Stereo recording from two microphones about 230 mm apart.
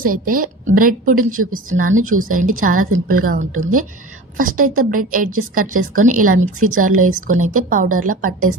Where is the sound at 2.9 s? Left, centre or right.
Right.